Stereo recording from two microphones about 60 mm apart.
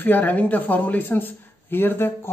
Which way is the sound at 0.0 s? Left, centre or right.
Left.